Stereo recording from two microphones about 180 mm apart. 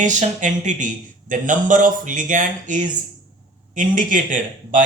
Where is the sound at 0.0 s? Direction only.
45° right (ahead or behind).